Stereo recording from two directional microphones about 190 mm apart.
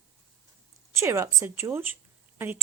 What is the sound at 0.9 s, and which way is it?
A woman's voice, 15° right (ahead or behind).